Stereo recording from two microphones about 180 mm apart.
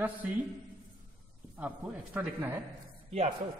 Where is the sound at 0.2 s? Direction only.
5° right (ahead or behind).